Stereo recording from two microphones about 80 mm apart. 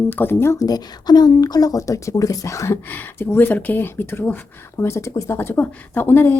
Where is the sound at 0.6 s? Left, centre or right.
Left.